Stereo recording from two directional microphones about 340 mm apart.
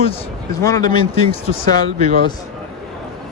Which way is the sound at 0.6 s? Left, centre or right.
Centre.